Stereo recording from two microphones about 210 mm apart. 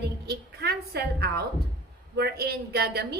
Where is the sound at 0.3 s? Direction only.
50° right (ahead or behind).